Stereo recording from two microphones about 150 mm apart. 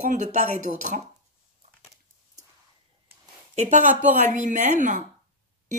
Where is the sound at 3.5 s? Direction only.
55° right (ahead or behind).